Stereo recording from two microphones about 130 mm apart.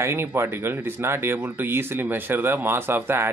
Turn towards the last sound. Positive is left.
turn(degrees=-20)  # may be behind; listen again after turning